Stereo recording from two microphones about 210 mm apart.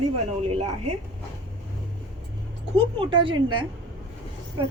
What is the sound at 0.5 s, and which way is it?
Speech, 30° right (ahead or behind).